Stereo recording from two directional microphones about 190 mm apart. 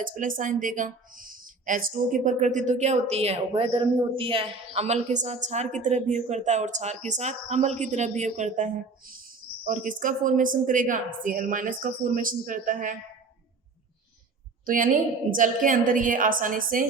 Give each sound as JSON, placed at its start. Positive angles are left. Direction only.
{"t": 0.0, "sound": "a woman's voice", "side_deg": -45}
{"t": 14.6, "sound": "a woman's voice", "side_deg": -45}